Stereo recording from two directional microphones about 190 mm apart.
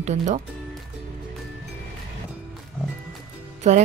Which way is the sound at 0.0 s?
35° right (ahead or behind).